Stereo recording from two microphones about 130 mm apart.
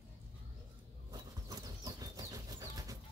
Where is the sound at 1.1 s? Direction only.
30° right (ahead or behind).